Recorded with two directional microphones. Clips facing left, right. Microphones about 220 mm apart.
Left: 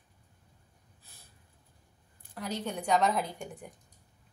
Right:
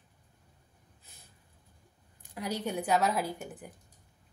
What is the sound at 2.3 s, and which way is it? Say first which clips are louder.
A woman's voice: right 2 dB; 10° right (ahead or behind).